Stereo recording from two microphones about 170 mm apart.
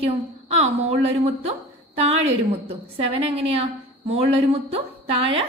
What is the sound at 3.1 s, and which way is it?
A woman's voice, 35° right (ahead or behind).